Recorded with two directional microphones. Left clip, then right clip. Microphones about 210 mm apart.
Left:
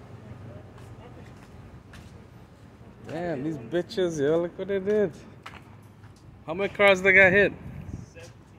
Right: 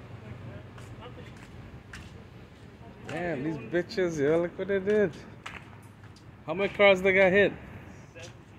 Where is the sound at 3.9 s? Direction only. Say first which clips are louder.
Left 4 dB; 15° left (ahead or behind).